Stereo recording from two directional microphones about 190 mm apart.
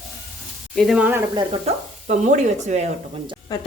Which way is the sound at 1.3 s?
35° right (ahead or behind).